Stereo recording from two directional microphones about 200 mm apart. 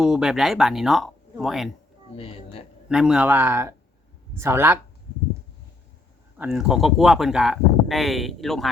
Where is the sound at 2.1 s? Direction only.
30° left (ahead or behind).